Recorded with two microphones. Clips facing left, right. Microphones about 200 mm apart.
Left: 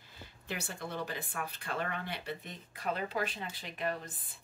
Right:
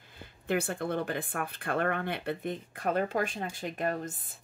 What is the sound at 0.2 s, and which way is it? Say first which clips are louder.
Speech: right 11 dB; 55° right (ahead or behind).